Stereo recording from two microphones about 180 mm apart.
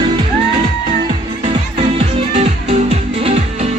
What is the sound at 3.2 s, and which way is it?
Music, 35° right (ahead or behind).